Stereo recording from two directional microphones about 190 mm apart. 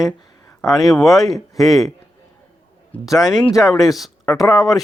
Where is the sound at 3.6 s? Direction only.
Centre (ahead or behind).